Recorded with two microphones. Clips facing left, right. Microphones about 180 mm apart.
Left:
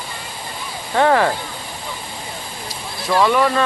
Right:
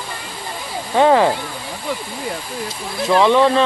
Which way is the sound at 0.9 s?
15° right (ahead or behind).